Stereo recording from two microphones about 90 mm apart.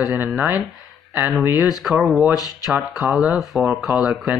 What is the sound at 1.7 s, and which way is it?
Speech, 5° right (ahead or behind).